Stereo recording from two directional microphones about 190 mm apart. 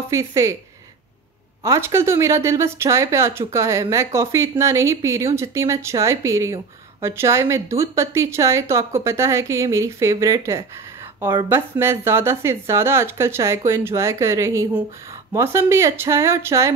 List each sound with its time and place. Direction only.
0.1 s speech: 15° right (ahead or behind)
1.6 s speech: 15° right (ahead or behind)